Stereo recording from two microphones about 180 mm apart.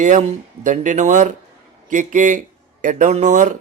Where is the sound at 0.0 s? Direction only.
45° right (ahead or behind).